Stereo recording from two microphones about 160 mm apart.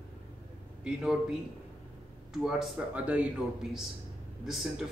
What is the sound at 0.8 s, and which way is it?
Speech, 5° right (ahead or behind).